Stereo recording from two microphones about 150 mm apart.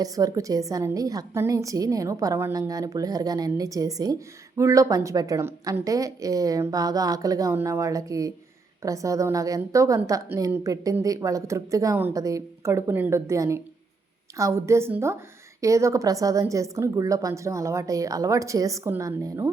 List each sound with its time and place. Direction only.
0.0 s a woman's voice: 25° right (ahead or behind)